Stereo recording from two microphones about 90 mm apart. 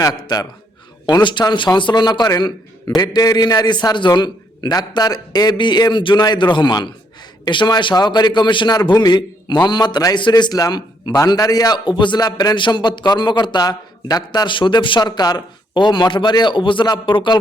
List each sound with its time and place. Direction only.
1.0 s a man's voice: 60° left (ahead or behind)
10.2 s a man's voice: 60° left (ahead or behind)